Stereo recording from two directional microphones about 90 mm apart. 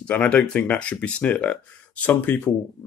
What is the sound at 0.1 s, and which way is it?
Speech, 15° left (ahead or behind).